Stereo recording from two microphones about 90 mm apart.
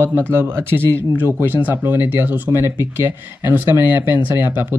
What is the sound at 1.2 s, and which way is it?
Speech, 20° right (ahead or behind).